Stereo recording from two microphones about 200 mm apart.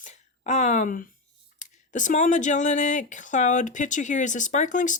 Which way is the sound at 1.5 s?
40° left (ahead or behind).